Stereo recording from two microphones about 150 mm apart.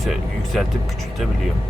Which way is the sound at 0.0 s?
Centre (ahead or behind).